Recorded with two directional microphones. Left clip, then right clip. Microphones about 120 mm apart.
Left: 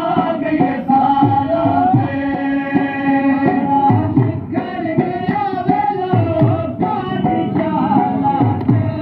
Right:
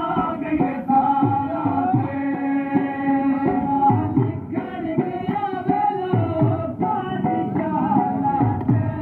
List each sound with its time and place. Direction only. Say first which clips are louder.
0.1 s music: left 6 dB; 15° left (ahead or behind)
5.7 s music: left 3 dB; 5° left (ahead or behind)